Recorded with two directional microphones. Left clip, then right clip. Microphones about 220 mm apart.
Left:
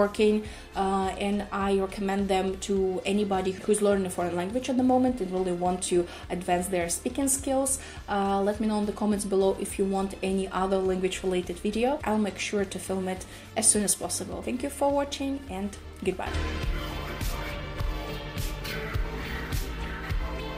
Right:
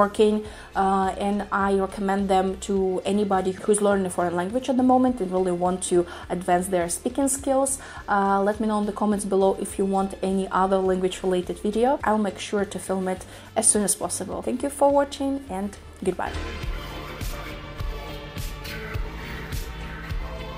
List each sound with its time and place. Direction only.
0.2 s a woman's voice: 20° right (ahead or behind)